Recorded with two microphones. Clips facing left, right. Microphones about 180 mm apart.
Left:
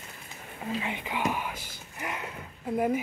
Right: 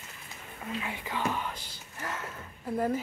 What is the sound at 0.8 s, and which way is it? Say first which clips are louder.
Speech: left 1 dB; 20° left (ahead or behind).